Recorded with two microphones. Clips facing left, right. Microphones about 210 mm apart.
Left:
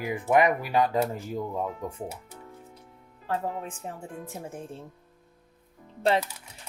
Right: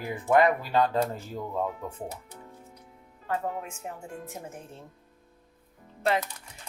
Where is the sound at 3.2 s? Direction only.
35° left (ahead or behind).